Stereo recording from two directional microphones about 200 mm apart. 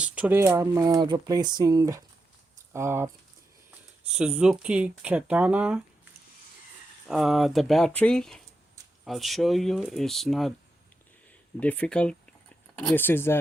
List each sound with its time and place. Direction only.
0.0 s speech: 10° right (ahead or behind)
4.1 s speech: 5° right (ahead or behind)
7.1 s speech: centre (ahead or behind)
11.6 s speech: 5° left (ahead or behind)